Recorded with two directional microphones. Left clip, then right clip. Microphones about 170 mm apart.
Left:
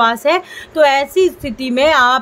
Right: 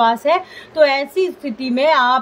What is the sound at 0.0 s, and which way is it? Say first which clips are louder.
A woman's voice: left 1 dB; 35° left (ahead or behind).